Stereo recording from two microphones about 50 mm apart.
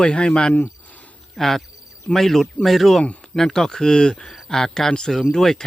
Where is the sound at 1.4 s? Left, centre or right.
Centre.